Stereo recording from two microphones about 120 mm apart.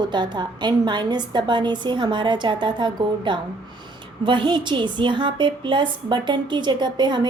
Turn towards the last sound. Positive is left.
turn(degrees=-40)  # may be behind; listen again after turning